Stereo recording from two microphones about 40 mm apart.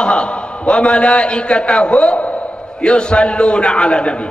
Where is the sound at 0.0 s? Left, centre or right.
Left.